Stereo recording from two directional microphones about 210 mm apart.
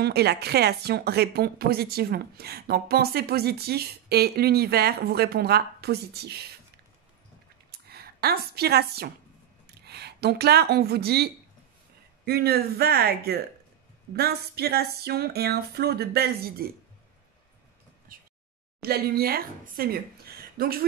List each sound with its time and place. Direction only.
0.0 s speech: 50° right (ahead or behind)
7.7 s a woman's voice: 50° right (ahead or behind)
12.3 s speech: 50° right (ahead or behind)
18.1 s a sound: 40° right (ahead or behind)
18.8 s speech: 50° right (ahead or behind)